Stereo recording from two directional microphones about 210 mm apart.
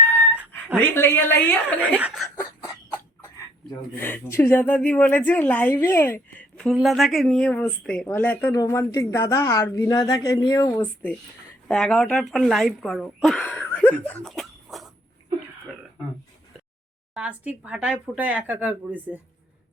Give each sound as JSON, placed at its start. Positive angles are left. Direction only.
{"t": 0.8, "sound": "speech", "side_deg": 10}
{"t": 2.0, "sound": "speech", "side_deg": -5}
{"t": 2.4, "sound": "cough", "side_deg": 15}
{"t": 3.9, "sound": "speech", "side_deg": 10}
{"t": 14.1, "sound": "cough", "side_deg": 5}
{"t": 17.2, "sound": "speech", "side_deg": -5}